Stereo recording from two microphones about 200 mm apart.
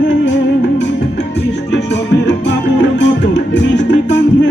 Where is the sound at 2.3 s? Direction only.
60° left (ahead or behind).